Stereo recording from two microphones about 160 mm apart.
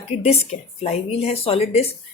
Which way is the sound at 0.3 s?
40° left (ahead or behind).